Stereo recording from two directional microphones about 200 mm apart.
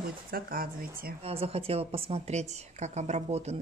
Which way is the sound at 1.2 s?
30° right (ahead or behind).